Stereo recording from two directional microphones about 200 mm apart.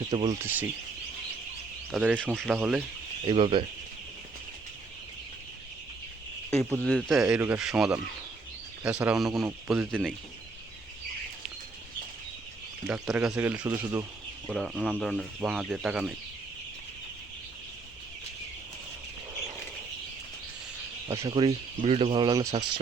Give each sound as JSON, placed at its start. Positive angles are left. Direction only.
{"t": 0.1, "sound": "speech", "side_deg": -20}
{"t": 1.9, "sound": "speech", "side_deg": 0}
{"t": 3.2, "sound": "speech", "side_deg": -25}
{"t": 6.6, "sound": "speech", "side_deg": 5}
{"t": 12.9, "sound": "speech", "side_deg": -5}
{"t": 21.1, "sound": "speech", "side_deg": -20}